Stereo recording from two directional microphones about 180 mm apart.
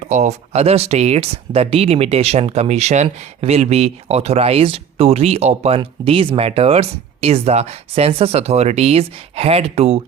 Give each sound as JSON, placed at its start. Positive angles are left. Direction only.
{"t": 0.0, "sound": "speech", "side_deg": -40}